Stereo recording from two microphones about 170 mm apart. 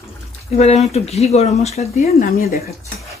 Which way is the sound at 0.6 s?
40° left (ahead or behind).